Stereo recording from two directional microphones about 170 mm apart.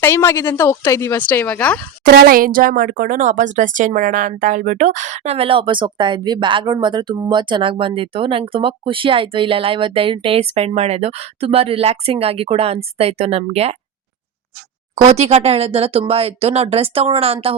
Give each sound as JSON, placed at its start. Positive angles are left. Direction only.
{"t": 0.0, "sound": "speech", "side_deg": 15}
{"t": 2.0, "sound": "speech", "side_deg": -70}
{"t": 15.0, "sound": "speech", "side_deg": -40}